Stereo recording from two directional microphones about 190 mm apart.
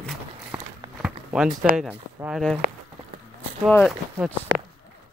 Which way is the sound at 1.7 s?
5° right (ahead or behind).